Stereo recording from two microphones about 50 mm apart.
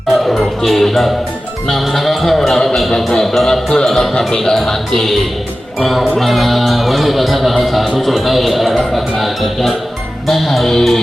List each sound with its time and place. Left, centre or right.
0.1 s music: centre
1.6 s a man's voice: centre